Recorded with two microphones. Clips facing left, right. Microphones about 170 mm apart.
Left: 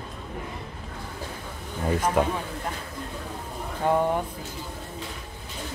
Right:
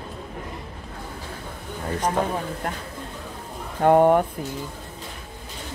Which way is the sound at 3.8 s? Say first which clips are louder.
Right 8 dB; 60° right (ahead or behind).